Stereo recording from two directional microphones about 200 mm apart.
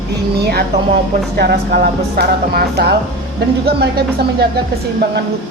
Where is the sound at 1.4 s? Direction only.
55° right (ahead or behind).